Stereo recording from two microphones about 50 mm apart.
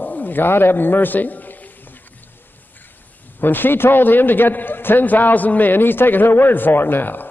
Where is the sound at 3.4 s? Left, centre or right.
Left.